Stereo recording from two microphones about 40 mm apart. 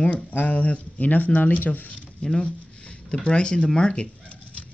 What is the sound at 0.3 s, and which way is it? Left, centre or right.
Speech, left.